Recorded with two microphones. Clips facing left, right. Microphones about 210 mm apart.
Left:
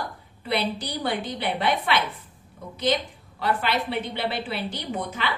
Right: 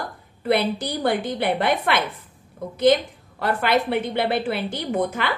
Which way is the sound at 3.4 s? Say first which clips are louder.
Right 4 dB; 50° right (ahead or behind).